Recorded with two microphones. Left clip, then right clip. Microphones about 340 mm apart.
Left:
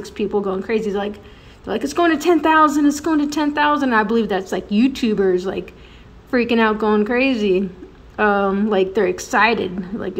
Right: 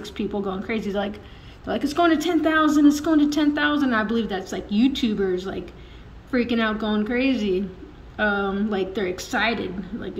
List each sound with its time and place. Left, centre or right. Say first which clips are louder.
0.0 s speech: left 7 dB; centre